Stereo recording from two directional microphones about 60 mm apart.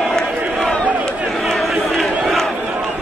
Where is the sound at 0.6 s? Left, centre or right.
Left.